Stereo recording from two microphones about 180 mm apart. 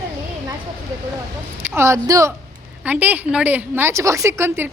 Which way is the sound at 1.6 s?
15° right (ahead or behind).